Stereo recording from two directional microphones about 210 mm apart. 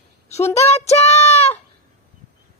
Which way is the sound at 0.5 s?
30° left (ahead or behind).